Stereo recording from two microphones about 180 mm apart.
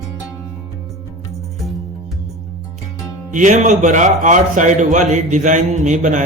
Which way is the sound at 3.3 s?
45° right (ahead or behind).